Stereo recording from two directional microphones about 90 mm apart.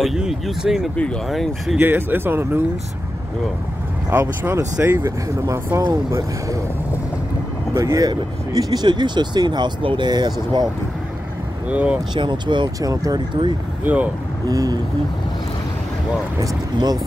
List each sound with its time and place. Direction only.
0.0 s speech: 5° right (ahead or behind)
1.8 s speech: 20° right (ahead or behind)
4.1 s speech: 25° right (ahead or behind)
5.8 s speech: 40° right (ahead or behind)
7.7 s speech: 35° right (ahead or behind)
8.1 s speech: 55° right (ahead or behind)
11.7 s speech: 15° right (ahead or behind)
12.2 s speech: 60° right (ahead or behind)
12.8 s speech: 40° right (ahead or behind)
14.5 s speech: 45° right (ahead or behind)
16.3 s speech: 45° right (ahead or behind)